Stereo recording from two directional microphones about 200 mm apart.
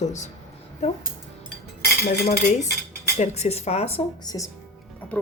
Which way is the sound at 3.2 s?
35° left (ahead or behind).